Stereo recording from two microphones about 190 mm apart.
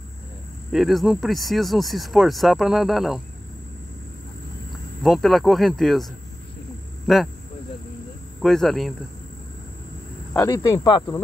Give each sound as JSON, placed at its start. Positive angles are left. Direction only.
{"t": 0.7, "sound": "speech", "side_deg": 0}
{"t": 5.0, "sound": "speech", "side_deg": 0}
{"t": 7.1, "sound": "speech", "side_deg": 0}
{"t": 8.4, "sound": "speech", "side_deg": 0}
{"t": 10.3, "sound": "speech", "side_deg": 15}